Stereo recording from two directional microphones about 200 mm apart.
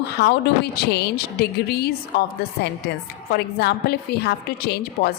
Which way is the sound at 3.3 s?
55° left (ahead or behind).